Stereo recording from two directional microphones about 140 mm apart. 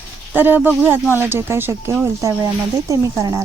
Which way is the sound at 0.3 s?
15° right (ahead or behind).